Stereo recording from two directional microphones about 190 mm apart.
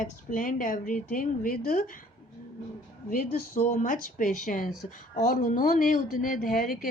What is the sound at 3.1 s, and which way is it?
Speech, 50° left (ahead or behind).